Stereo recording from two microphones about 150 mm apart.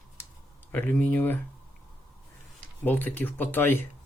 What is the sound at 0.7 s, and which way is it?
Speech, 10° left (ahead or behind).